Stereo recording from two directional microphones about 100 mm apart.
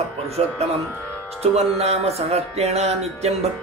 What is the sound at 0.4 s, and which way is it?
Music, 90° right.